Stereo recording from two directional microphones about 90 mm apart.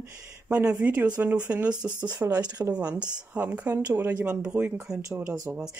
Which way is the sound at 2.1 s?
45° right (ahead or behind).